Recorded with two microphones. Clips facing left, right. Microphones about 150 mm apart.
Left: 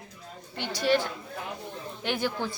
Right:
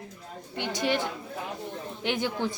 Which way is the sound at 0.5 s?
15° right (ahead or behind).